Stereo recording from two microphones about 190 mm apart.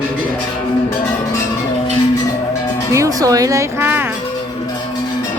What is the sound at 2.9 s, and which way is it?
Music, 15° right (ahead or behind).